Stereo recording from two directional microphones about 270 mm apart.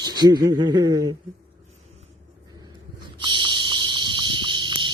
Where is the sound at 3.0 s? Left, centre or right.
Centre.